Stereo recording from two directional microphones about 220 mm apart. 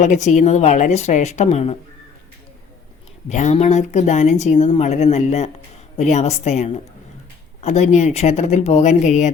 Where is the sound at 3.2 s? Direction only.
30° left (ahead or behind).